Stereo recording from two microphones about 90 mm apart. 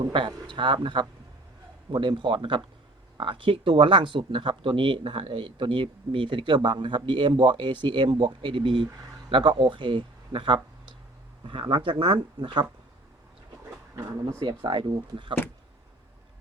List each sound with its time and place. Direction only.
0.0 s speech: 60° right (ahead or behind)
14.3 s speech: 60° right (ahead or behind)